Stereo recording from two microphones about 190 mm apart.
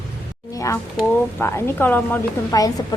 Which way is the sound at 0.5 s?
15° left (ahead or behind).